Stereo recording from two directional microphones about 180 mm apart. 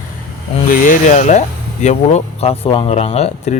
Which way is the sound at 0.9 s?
45° left (ahead or behind).